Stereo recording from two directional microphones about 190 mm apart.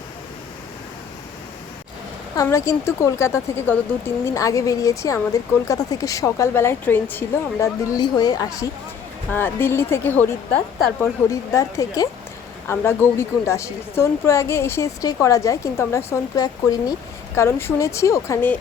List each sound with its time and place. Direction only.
2.3 s speech: 15° left (ahead or behind)